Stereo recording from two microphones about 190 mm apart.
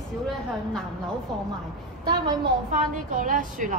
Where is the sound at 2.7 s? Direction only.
45° right (ahead or behind).